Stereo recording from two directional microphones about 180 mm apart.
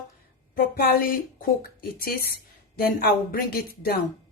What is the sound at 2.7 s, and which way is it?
Speech, 55° left (ahead or behind).